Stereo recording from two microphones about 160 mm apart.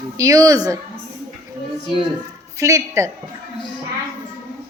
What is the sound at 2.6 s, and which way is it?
Speech, 20° right (ahead or behind).